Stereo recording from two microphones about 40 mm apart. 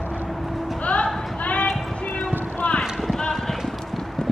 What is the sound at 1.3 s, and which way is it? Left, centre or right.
Clip-clop, left.